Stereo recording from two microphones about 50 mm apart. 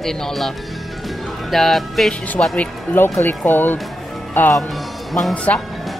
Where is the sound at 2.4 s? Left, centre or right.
Left.